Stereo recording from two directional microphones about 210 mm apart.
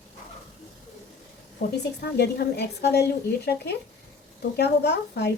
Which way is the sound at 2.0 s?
50° left (ahead or behind).